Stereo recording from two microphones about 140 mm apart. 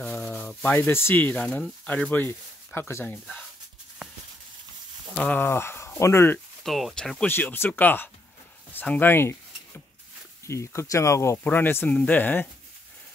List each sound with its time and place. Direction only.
0.0 s a sound: 5° left (ahead or behind)
0.7 s speech: 15° left (ahead or behind)
5.1 s speech: 10° left (ahead or behind)
6.6 s speech: centre (ahead or behind); by 9.4 s 15° left (ahead or behind)
10.4 s speech: 20° left (ahead or behind)